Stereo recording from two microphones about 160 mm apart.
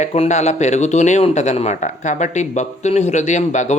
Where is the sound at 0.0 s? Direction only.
45° left (ahead or behind).